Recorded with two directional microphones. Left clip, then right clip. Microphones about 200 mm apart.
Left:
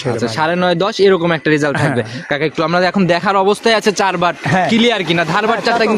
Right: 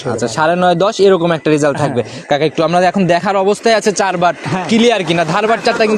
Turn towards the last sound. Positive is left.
turn(degrees=-5)  # may be behind; listen again after turning